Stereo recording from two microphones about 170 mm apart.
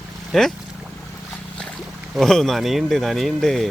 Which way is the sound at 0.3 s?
Centre (ahead or behind).